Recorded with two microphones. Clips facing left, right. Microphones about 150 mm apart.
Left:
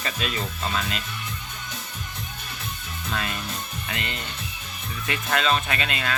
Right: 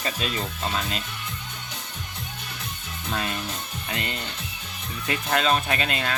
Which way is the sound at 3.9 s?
35° right (ahead or behind).